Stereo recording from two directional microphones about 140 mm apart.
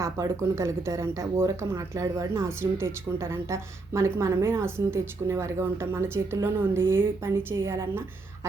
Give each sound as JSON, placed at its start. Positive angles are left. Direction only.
{"t": 0.0, "sound": "speech", "side_deg": -20}